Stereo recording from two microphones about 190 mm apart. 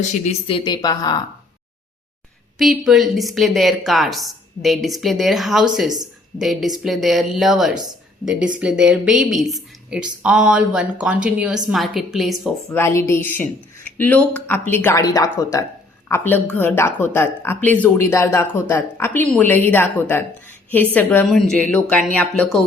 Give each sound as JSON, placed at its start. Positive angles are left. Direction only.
{"t": 0.1, "sound": "a woman's voice", "side_deg": 30}
{"t": 2.6, "sound": "a woman's voice", "side_deg": 0}
{"t": 12.6, "sound": "speech", "side_deg": 15}